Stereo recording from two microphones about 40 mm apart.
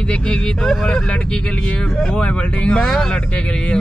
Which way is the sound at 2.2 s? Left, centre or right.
Left.